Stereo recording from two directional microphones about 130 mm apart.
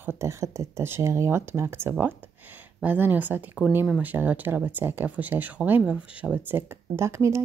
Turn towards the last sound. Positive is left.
turn(degrees=-20)  # may be behind; listen again after turning